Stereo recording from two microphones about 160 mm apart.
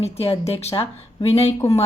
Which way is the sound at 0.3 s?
40° left (ahead or behind).